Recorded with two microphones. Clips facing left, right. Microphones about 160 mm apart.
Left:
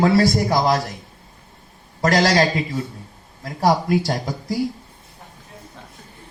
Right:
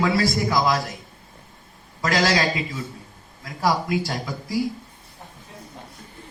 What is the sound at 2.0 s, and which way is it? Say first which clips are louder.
A man's voice: left 4 dB; 40° left (ahead or behind).